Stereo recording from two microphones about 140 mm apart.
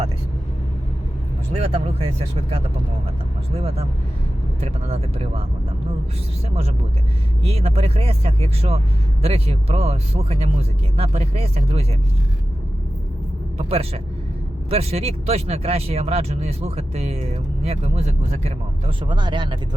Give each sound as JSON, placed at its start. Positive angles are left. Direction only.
{"t": 1.5, "sound": "speech", "side_deg": -45}
{"t": 6.5, "sound": "speech", "side_deg": -45}
{"t": 13.6, "sound": "speech", "side_deg": -45}
{"t": 19.0, "sound": "speech", "side_deg": -35}